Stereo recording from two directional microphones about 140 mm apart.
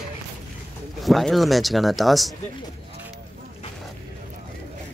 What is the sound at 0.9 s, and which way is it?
Speech, centre (ahead or behind).